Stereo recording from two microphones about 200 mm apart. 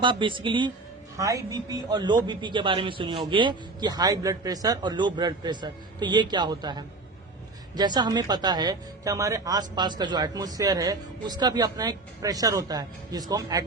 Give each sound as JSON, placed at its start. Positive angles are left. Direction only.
{"t": 0.0, "sound": "speech", "side_deg": -25}